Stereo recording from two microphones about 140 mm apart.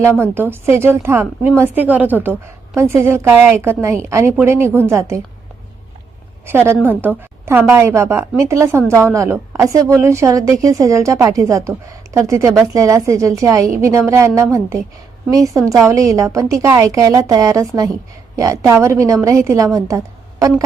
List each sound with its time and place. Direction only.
0.0 s a woman's voice: 15° right (ahead or behind)
7.0 s a woman's voice: 15° right (ahead or behind)